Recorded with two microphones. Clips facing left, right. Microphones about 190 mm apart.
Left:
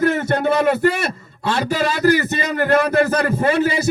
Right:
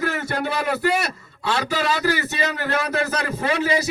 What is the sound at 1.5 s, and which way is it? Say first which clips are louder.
A man's voice: left 3 dB; 50° left (ahead or behind).